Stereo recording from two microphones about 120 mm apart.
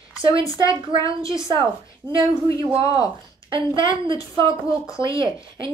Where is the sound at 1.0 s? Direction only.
25° left (ahead or behind).